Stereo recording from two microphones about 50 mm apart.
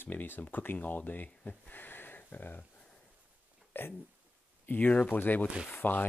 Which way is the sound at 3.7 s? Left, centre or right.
Left.